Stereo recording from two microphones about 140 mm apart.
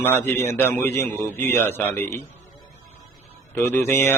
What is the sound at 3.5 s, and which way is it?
Speech, 15° left (ahead or behind).